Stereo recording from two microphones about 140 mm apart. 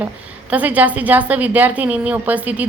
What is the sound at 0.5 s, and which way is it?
A woman's voice, 10° right (ahead or behind).